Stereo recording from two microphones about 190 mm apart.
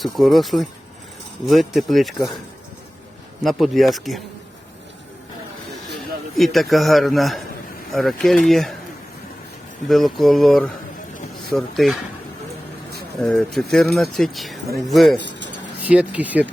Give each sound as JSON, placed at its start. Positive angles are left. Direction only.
{"t": 0.0, "sound": "speech", "side_deg": 0}
{"t": 3.4, "sound": "speech", "side_deg": 0}
{"t": 6.3, "sound": "speech", "side_deg": 0}
{"t": 9.9, "sound": "speech", "side_deg": 0}
{"t": 13.1, "sound": "speech", "side_deg": 0}
{"t": 15.2, "sound": "speech", "side_deg": -70}
{"t": 15.8, "sound": "speech", "side_deg": -10}